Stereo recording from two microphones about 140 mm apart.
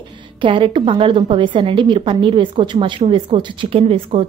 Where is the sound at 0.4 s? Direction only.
35° right (ahead or behind).